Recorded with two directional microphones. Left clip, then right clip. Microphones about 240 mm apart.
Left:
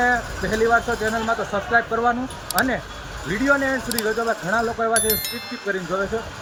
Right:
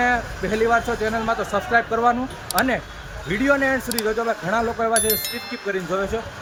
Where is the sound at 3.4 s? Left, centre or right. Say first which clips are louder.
Right 1 dB; centre.